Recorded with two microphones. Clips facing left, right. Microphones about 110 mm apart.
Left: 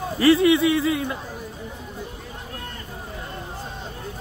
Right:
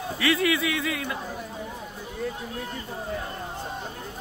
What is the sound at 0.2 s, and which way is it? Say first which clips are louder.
Speech: left 8 dB; 30° left (ahead or behind).